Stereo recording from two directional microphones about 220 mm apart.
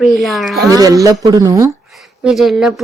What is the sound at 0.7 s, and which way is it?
Speech, 15° right (ahead or behind).